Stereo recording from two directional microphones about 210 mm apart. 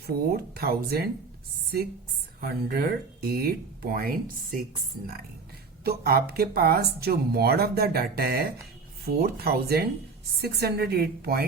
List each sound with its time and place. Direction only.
0.3 s speech: 45° right (ahead or behind)
2.4 s speech: 45° right (ahead or behind)
5.8 s speech: 50° right (ahead or behind)